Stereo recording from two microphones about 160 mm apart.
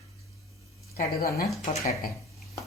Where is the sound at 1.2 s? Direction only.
70° left (ahead or behind).